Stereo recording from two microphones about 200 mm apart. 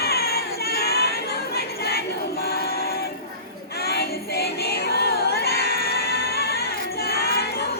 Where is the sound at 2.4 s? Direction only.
50° left (ahead or behind).